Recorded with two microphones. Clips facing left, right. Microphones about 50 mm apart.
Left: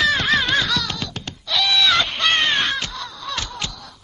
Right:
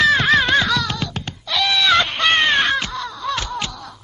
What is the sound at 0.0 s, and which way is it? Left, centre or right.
Music, centre.